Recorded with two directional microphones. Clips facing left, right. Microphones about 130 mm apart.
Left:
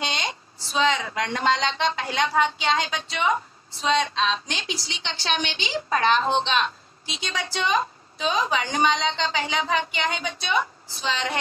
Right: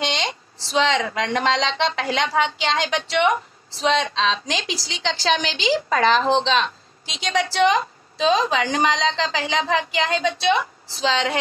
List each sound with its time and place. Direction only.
0.0 s speech: 85° right